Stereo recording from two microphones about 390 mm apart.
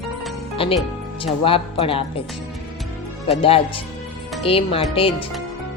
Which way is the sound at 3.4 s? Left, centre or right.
Centre.